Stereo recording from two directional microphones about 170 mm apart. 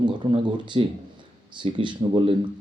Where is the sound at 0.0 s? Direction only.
30° right (ahead or behind).